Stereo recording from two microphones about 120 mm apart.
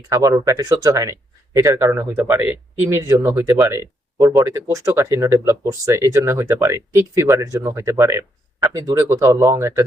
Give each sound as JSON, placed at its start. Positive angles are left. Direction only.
{"t": 0.1, "sound": "speech", "side_deg": -30}